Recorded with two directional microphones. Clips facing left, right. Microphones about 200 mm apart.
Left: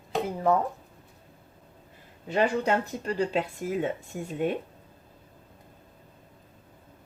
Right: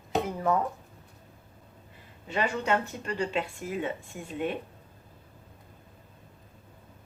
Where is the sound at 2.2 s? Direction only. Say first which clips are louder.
Left 4 dB; 40° left (ahead or behind).